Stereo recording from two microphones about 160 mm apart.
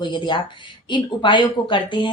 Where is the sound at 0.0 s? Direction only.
30° left (ahead or behind).